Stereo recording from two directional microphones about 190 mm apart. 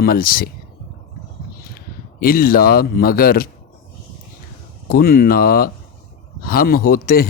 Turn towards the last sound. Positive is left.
turn(degrees=50)  # may be behind; listen again after turning